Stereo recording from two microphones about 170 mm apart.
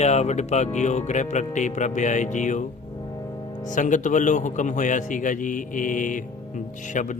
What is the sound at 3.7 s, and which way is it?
Speech, 50° left (ahead or behind).